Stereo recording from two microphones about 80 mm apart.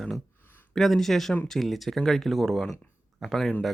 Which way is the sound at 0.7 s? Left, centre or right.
Centre.